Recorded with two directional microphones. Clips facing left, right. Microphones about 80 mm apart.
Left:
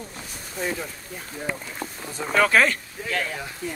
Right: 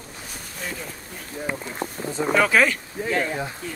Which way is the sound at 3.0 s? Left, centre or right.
Right.